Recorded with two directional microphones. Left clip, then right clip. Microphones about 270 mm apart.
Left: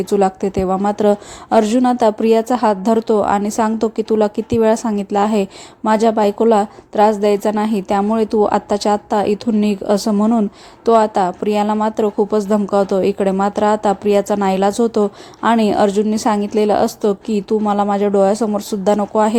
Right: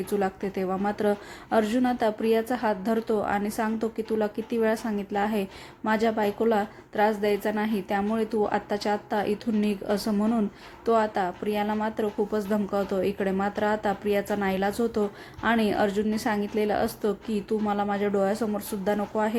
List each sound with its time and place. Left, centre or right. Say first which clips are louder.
0.0 s a woman's voice: left 12 dB; left